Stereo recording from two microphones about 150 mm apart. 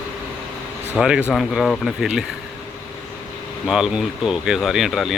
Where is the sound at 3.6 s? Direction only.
5° right (ahead or behind).